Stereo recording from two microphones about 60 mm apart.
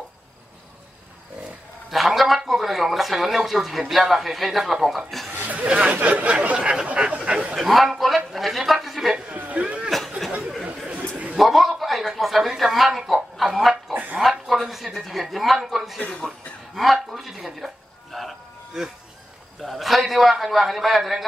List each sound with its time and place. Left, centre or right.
1.9 s a man's voice: centre
5.3 s a sound: right
7.5 s a sound: centre
8.3 s speech: centre
9.1 s chatter: right
9.8 s a sound: centre
11.3 s a man's voice: centre
14.2 s a sound: centre
14.7 s a man's voice: centre
16.0 s speech: left
16.3 s speech: centre
18.1 s music: centre
19.6 s a man's voice: centre